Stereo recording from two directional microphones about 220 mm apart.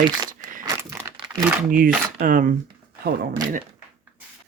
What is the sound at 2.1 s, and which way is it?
Speech, 40° right (ahead or behind).